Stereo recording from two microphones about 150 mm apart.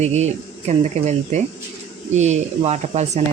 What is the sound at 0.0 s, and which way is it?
Speech, 50° right (ahead or behind).